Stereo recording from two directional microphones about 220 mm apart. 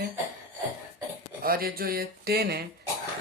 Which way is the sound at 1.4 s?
40° right (ahead or behind).